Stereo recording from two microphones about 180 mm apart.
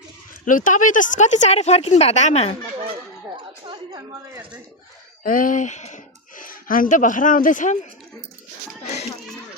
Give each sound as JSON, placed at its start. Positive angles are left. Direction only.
{"t": 0.4, "sound": "speech", "side_deg": 45}
{"t": 3.3, "sound": "a sound", "side_deg": -25}
{"t": 5.2, "sound": "speech", "side_deg": 50}